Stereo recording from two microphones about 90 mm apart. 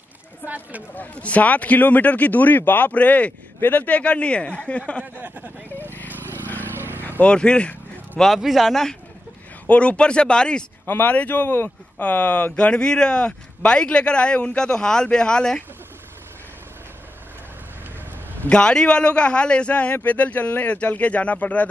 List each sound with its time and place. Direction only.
0.5 s speech: 15° right (ahead or behind)
0.9 s speech: 15° left (ahead or behind)
5.0 s vehicle: 20° right (ahead or behind)
5.9 s vehicle: 20° left (ahead or behind)
6.8 s vehicle: 25° right (ahead or behind)
7.1 s speech: 15° left (ahead or behind)
8.2 s speech: centre (ahead or behind)
9.7 s speech: 15° left (ahead or behind)
18.4 s speech: 10° left (ahead or behind)